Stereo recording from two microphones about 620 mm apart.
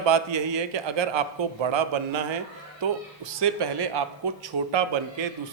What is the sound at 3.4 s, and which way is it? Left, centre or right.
A man's voice, right.